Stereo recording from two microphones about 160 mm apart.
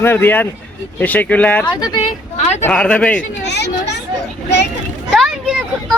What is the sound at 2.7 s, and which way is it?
Speech, 5° left (ahead or behind).